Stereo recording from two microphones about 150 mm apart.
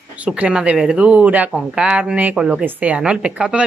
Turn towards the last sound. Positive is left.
turn(degrees=-5)  # may be behind; listen again after turning